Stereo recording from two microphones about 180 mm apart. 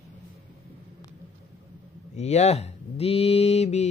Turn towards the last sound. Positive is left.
turn(degrees=35)  # may be behind; listen again after turning